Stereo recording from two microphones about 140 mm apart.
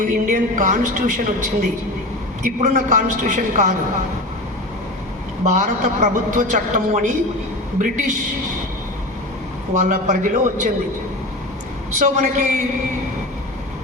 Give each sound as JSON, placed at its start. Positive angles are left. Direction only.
{"t": 0.0, "sound": "a man's voice", "side_deg": -70}
{"t": 5.5, "sound": "a man's voice", "side_deg": -65}
{"t": 9.7, "sound": "a man's voice", "side_deg": -65}
{"t": 11.9, "sound": "a man's voice", "side_deg": -60}